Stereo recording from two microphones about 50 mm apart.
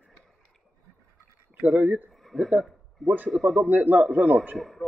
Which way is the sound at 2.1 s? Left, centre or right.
Centre.